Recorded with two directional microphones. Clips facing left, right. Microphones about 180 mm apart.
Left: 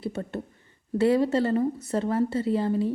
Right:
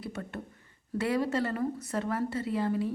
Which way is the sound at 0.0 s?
30° left (ahead or behind).